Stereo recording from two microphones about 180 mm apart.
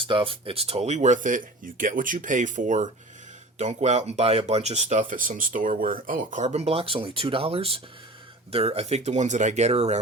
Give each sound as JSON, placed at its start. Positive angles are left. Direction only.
{"t": 0.0, "sound": "speech", "side_deg": -30}